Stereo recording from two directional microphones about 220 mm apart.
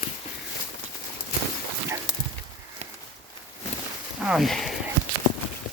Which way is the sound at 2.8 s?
30° right (ahead or behind).